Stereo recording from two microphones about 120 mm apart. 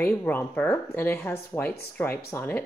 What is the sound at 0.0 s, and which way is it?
Speech, 20° left (ahead or behind).